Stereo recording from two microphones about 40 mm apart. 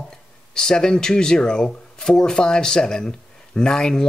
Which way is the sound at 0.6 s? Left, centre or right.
Centre.